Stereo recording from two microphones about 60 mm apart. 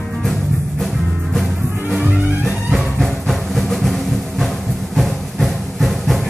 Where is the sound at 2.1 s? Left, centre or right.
Right.